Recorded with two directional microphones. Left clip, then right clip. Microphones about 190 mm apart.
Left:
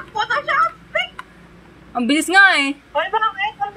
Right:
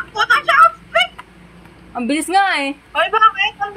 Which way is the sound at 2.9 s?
35° right (ahead or behind).